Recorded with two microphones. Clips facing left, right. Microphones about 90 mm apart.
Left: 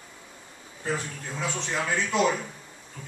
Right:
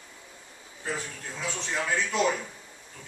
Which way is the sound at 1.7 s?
5° left (ahead or behind).